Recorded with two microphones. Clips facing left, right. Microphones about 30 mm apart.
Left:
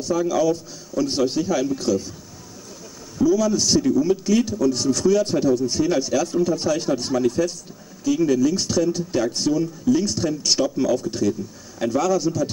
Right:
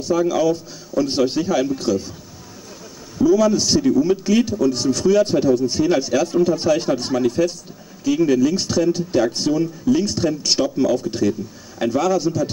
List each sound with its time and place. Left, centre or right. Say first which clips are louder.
0.0 s a man's voice: right 2 dB; centre
3.2 s a man's voice: right 3 dB; centre